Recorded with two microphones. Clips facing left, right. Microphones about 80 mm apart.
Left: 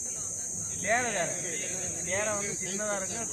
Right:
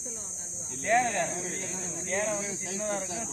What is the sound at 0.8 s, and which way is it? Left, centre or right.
Snake, left.